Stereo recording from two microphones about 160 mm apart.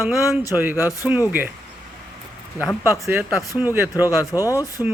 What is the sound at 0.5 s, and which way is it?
Speech, 10° right (ahead or behind).